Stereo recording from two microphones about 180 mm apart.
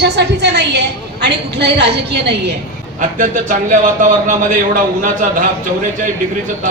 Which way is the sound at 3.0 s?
45° right (ahead or behind).